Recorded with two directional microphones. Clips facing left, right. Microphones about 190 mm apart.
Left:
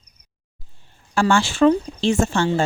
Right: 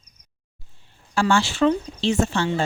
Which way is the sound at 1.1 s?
50° left (ahead or behind).